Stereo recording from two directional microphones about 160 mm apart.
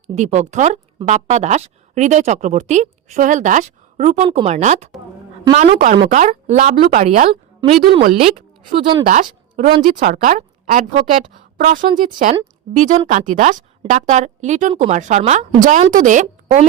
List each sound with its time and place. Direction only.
0.1 s a woman's voice: 45° right (ahead or behind)
9.0 s a woman's voice: 60° right (ahead or behind)
11.9 s a woman's voice: 55° right (ahead or behind)